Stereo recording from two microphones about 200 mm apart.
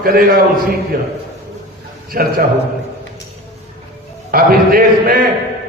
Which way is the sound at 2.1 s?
45° right (ahead or behind).